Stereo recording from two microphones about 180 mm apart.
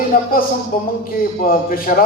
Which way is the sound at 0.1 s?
55° left (ahead or behind).